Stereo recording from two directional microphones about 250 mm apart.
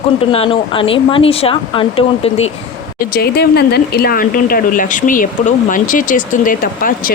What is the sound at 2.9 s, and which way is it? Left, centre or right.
Speech, left.